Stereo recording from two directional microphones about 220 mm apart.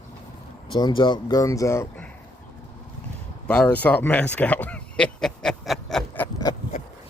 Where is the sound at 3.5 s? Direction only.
5° left (ahead or behind).